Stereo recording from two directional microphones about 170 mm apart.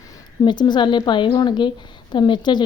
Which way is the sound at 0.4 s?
25° left (ahead or behind).